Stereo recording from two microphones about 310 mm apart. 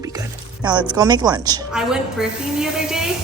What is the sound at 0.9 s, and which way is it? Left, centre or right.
Speech, centre.